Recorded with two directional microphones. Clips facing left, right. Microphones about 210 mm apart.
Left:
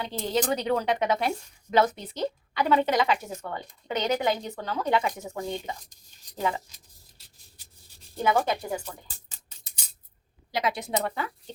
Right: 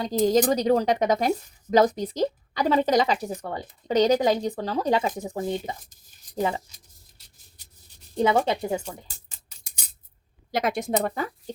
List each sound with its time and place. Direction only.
0.0 s a woman's voice: 40° right (ahead or behind)
8.1 s speech: 25° right (ahead or behind)
10.5 s a woman's voice: 50° right (ahead or behind)